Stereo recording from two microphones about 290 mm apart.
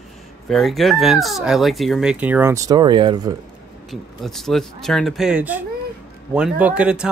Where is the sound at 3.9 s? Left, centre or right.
Centre.